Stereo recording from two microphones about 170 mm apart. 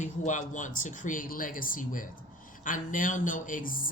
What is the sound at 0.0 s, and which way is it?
Speech, 50° left (ahead or behind).